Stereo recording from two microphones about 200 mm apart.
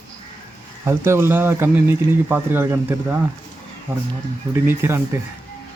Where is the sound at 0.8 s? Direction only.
15° right (ahead or behind).